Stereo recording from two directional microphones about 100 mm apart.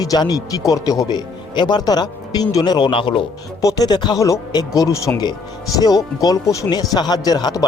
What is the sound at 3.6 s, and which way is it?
Speech, 35° left (ahead or behind).